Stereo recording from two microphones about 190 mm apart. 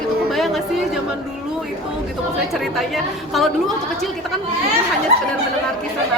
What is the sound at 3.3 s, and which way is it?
Speech, centre (ahead or behind).